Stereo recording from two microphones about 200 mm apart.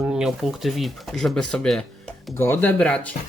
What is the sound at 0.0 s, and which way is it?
Speech, 5° right (ahead or behind).